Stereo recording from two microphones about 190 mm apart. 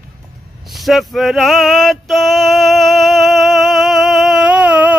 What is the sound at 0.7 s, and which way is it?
Male singing, centre (ahead or behind).